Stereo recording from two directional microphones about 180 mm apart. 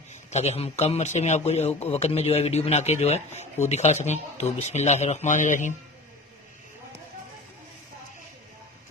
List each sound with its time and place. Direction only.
0.3 s speech: 40° left (ahead or behind)